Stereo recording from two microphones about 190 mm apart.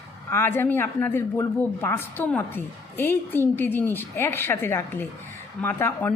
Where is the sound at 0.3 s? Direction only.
15° left (ahead or behind).